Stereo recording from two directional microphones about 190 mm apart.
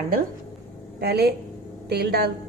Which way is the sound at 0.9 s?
55° right (ahead or behind).